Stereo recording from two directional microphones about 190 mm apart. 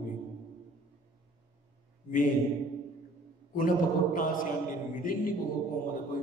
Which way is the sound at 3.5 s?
45° left (ahead or behind).